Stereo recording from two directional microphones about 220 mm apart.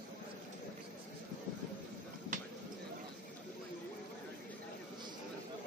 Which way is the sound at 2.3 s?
35° right (ahead or behind).